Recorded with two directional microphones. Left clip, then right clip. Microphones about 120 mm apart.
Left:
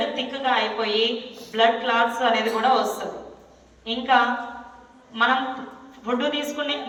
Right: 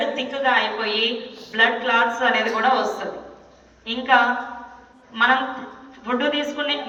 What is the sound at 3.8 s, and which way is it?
Speech, 35° left (ahead or behind).